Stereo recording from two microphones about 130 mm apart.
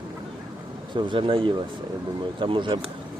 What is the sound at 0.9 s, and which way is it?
Speech, 40° right (ahead or behind).